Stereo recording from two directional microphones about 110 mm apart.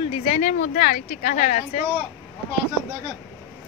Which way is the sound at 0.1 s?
90° left.